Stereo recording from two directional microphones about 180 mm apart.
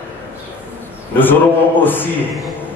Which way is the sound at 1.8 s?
10° left (ahead or behind).